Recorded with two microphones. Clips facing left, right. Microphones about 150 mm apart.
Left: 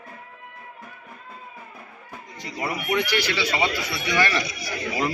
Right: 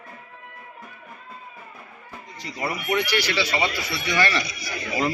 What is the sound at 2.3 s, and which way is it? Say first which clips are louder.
A man's voice: even; 20° left (ahead or behind).